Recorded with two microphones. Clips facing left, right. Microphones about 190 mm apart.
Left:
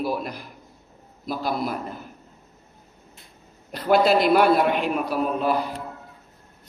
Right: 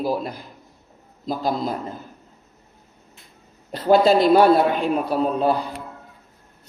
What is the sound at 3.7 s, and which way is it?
Speech, 30° right (ahead or behind).